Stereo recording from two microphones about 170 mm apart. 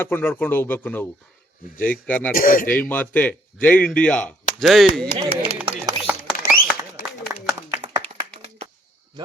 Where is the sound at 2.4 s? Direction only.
55° left (ahead or behind).